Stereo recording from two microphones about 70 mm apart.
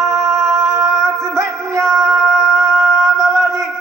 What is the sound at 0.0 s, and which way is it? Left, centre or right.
Music, right.